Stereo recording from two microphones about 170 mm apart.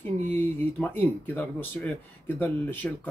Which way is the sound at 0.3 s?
10° left (ahead or behind).